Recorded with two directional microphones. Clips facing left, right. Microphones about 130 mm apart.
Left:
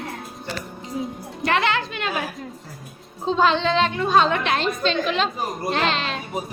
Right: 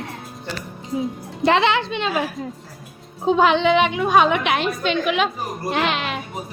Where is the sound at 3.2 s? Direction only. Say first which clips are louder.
Right 3 dB; 15° right (ahead or behind).